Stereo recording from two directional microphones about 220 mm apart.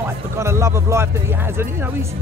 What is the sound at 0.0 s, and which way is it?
Speech, 10° right (ahead or behind).